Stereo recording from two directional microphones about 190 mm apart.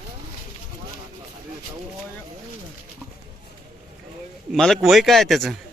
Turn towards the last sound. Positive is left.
turn(degrees=0)  # may be behind; listen again after turning